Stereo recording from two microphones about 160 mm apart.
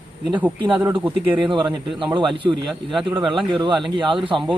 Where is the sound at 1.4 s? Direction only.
30° right (ahead or behind).